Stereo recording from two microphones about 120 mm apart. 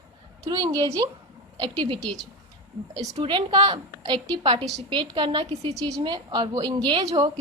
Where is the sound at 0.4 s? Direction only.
30° right (ahead or behind).